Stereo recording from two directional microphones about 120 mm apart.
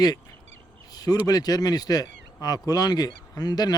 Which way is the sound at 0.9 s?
30° left (ahead or behind).